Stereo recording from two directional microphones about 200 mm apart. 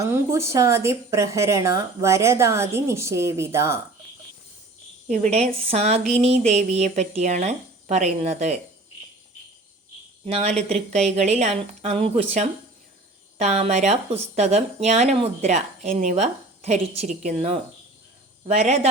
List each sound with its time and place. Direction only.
0.0 s a woman's voice: 15° right (ahead or behind)
5.0 s speech: 35° right (ahead or behind)
10.2 s speech: 30° right (ahead or behind)